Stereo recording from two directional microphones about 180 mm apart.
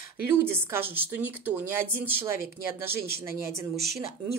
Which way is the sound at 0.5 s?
10° right (ahead or behind).